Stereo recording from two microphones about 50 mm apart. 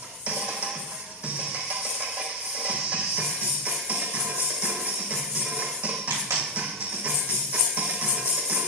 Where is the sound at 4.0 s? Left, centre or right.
Centre.